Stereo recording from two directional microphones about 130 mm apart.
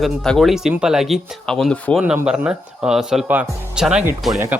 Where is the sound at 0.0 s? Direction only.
Centre (ahead or behind).